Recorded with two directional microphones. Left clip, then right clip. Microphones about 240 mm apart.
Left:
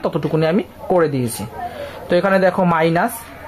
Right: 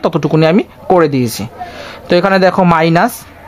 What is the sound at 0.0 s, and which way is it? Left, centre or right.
Speech, right.